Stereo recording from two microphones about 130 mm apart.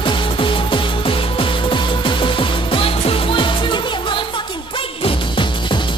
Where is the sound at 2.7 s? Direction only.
45° left (ahead or behind).